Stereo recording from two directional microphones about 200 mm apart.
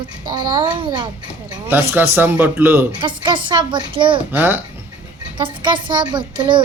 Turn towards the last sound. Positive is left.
turn(degrees=-25)  # may be behind; listen again after turning